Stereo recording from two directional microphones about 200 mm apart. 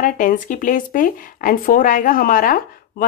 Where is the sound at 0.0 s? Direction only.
40° left (ahead or behind).